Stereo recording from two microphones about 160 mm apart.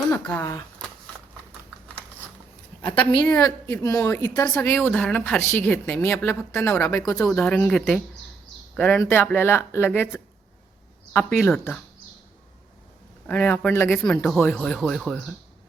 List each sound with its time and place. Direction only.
0.1 s a woman's voice: 15° left (ahead or behind)
2.8 s a woman's voice: 10° left (ahead or behind)
3.3 s a woman's voice: 20° left (ahead or behind)
13.2 s a woman's voice: 10° left (ahead or behind)